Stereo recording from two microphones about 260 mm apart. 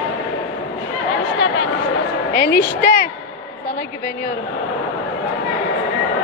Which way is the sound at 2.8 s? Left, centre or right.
Left.